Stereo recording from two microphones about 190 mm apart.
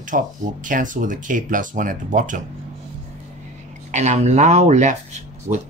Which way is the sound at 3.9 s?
35° right (ahead or behind).